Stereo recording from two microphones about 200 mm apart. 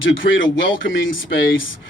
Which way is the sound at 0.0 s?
70° left (ahead or behind).